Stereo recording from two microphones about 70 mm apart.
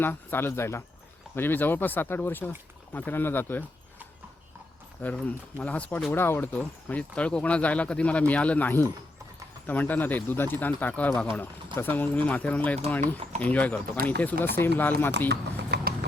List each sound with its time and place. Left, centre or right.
0.0 s speech: left
1.4 s speech: left
5.1 s speech: centre
6.1 s speech: left
6.5 s speech: left
14.4 s speech: left